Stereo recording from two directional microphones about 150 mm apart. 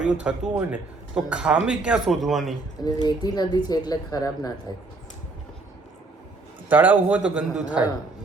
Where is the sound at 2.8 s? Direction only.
25° left (ahead or behind).